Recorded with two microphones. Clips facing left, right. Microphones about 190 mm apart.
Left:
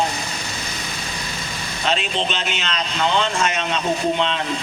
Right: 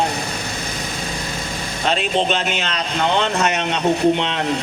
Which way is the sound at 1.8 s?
50° right (ahead or behind).